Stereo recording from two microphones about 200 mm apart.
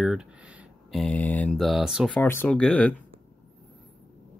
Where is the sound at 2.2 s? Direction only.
10° left (ahead or behind).